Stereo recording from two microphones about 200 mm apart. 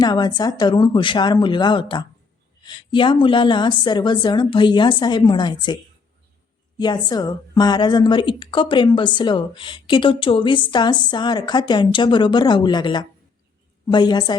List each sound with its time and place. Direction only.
0.0 s a woman's voice: 20° left (ahead or behind)